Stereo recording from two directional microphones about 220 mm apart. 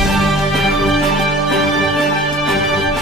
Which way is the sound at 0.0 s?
Centre (ahead or behind).